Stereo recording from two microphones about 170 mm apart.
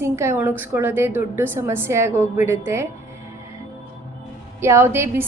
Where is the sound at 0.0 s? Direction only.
15° right (ahead or behind).